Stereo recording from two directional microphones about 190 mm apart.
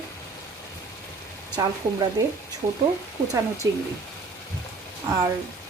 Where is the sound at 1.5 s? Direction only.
20° right (ahead or behind).